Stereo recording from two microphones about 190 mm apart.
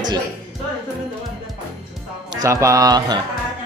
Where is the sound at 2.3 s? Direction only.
15° right (ahead or behind).